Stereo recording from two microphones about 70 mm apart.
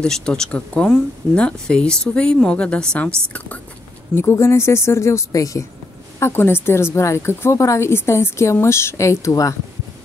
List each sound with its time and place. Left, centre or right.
0.0 s speech: centre
4.1 s speech: left
6.1 s speech: left
7.5 s a woman's voice: left